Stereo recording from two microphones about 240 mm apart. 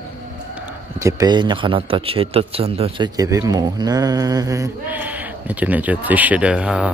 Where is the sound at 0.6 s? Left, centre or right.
Centre.